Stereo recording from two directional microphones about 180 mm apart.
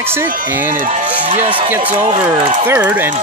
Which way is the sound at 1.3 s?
35° right (ahead or behind).